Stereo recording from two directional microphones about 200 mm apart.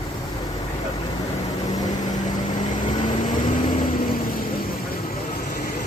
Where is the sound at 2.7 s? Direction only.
35° left (ahead or behind).